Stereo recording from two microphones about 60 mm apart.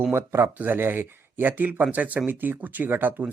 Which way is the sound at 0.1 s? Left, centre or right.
Right.